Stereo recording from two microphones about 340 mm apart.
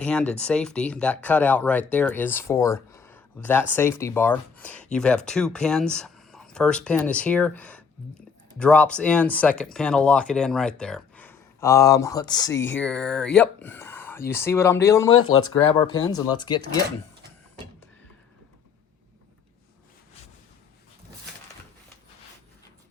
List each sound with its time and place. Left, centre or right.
0.0 s speech: centre
12.5 s speech: left
12.8 s speech: centre
15.1 s speech: left
16.0 s speech: centre